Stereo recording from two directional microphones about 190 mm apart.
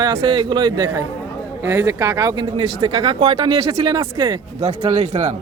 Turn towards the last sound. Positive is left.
turn(degrees=-35)  # may be behind; listen again after turning